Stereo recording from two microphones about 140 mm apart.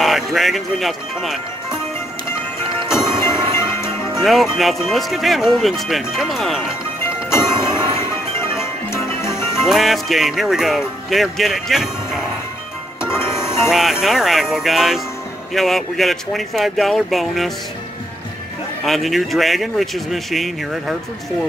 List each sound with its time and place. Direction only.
0.0 s speech: centre (ahead or behind)
2.9 s music: 20° left (ahead or behind)
4.2 s speech: centre (ahead or behind)
7.2 s a sound: 20° left (ahead or behind)
8.5 s music: 20° left (ahead or behind)
9.7 s speech: centre (ahead or behind)
13.0 s music: 20° left (ahead or behind)
13.7 s speech: centre (ahead or behind)
18.9 s speech: centre (ahead or behind)